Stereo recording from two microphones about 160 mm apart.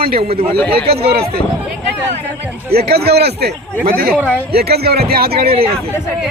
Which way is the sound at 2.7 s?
80° right.